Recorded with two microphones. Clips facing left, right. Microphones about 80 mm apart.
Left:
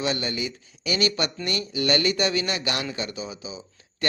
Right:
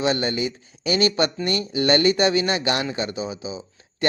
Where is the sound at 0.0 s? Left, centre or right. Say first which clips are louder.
Right 5 dB; right.